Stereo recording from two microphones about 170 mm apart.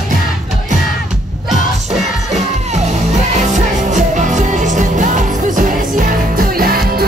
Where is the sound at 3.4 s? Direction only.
45° right (ahead or behind).